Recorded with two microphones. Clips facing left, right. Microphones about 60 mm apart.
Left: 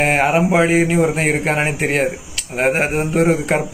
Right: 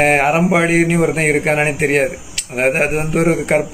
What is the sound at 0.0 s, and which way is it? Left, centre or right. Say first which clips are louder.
A man's voice: right 2 dB; right.